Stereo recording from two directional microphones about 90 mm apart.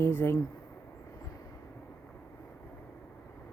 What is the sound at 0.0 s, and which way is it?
Speech, 25° left (ahead or behind).